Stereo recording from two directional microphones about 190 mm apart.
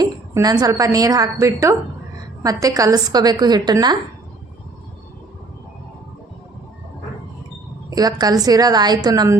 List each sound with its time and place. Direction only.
0.0 s a woman's voice: 20° right (ahead or behind)
7.9 s a woman's voice: 20° right (ahead or behind)